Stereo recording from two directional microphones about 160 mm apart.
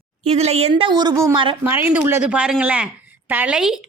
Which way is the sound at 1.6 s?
10° right (ahead or behind).